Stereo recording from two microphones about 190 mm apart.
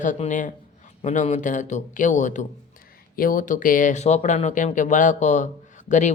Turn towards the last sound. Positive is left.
turn(degrees=40)  # may be behind; listen again after turning